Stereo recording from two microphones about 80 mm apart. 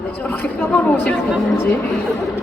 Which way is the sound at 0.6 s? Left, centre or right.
Centre.